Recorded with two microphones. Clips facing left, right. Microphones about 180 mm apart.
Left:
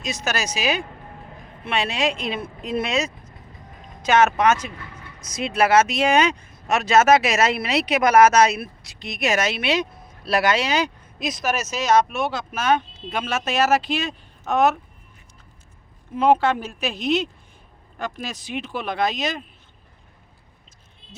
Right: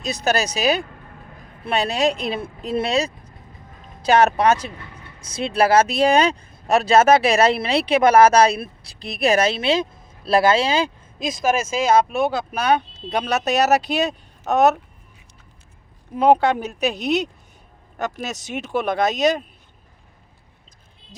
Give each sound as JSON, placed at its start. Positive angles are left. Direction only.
{"t": 0.0, "sound": "speech", "side_deg": -35}
{"t": 16.1, "sound": "speech", "side_deg": -40}
{"t": 17.9, "sound": "speech", "side_deg": -45}